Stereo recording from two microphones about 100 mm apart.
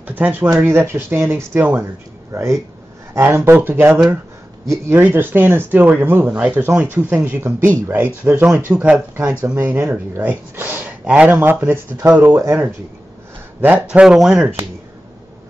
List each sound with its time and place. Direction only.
0.0 s a sound: 20° right (ahead or behind)
0.5 s speech: 25° right (ahead or behind)
9.3 s speech: 15° right (ahead or behind)
13.6 s speech: 15° right (ahead or behind)